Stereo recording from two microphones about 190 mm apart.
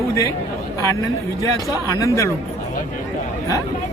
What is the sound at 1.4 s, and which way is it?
Speech, 15° left (ahead or behind).